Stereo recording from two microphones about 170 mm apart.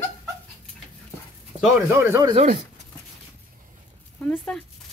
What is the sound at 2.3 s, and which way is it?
Speech, 40° right (ahead or behind).